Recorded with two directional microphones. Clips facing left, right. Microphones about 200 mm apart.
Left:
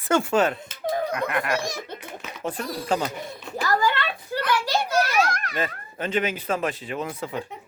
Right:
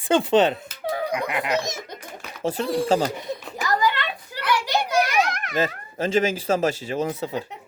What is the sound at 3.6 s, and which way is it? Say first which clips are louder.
Children playing: left 1 dB; 15° right (ahead or behind).